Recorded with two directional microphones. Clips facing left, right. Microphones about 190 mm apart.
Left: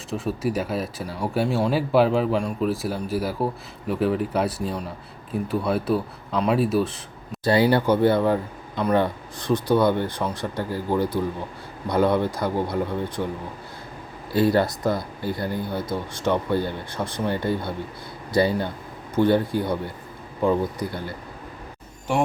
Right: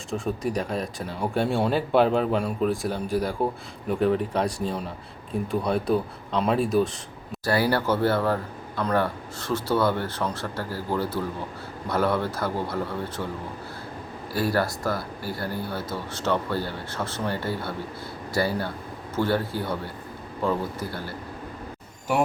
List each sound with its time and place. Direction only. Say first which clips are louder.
0.1 s a man's voice: left 2 dB; 5° left (ahead or behind)
7.4 s speech: left 4 dB; 20° left (ahead or behind)
14.3 s speech: left 5 dB; 20° left (ahead or behind)